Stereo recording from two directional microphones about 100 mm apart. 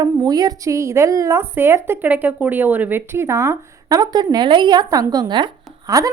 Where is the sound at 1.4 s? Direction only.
20° right (ahead or behind).